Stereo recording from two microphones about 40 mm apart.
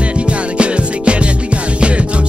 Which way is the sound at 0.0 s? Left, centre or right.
Right.